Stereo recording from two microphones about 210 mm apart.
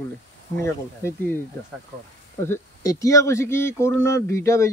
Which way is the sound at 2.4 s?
15° left (ahead or behind).